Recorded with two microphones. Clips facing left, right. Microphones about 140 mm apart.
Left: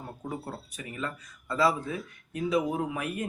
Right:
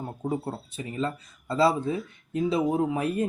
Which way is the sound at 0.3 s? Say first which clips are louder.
Right 7 dB; 30° right (ahead or behind).